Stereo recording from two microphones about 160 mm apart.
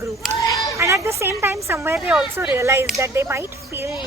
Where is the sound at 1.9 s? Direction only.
5° right (ahead or behind).